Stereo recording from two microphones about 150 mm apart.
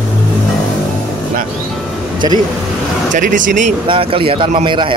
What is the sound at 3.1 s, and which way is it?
Speech, 60° right (ahead or behind).